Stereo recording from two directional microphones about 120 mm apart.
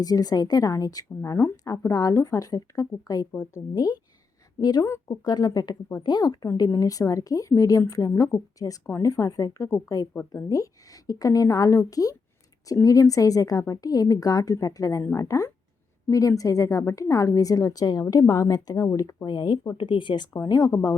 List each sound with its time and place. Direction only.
0.0 s a woman's voice: 30° left (ahead or behind)
20.3 s a woman's voice: 30° left (ahead or behind)